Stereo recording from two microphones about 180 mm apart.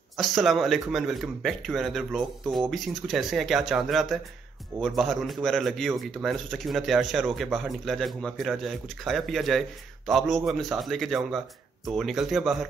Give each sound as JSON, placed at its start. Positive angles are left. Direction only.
{"t": 0.2, "sound": "a man's voice", "side_deg": 0}